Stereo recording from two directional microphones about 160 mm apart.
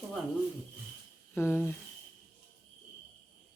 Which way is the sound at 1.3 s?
15° left (ahead or behind).